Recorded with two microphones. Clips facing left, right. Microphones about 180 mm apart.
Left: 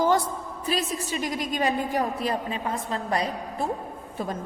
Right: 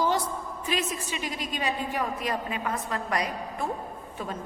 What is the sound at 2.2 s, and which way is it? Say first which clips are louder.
A woman's voice: left 2 dB; 30° left (ahead or behind).